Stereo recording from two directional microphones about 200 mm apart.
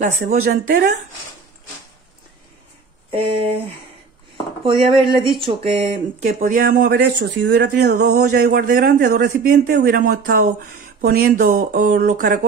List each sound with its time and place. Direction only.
0.0 s a man's voice: 40° right (ahead or behind)
3.1 s a sound: 25° right (ahead or behind)
4.6 s speech: 25° right (ahead or behind)
6.2 s a man's voice: 45° right (ahead or behind)